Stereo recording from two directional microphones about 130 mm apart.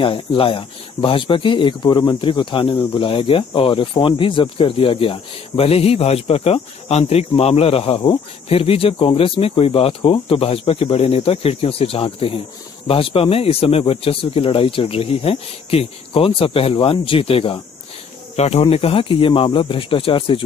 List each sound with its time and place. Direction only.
0.0 s speech: 40° left (ahead or behind)